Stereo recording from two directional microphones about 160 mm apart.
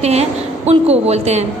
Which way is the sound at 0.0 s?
40° right (ahead or behind).